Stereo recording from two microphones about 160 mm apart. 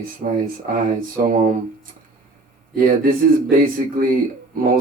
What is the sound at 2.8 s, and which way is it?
Speech, 60° right (ahead or behind).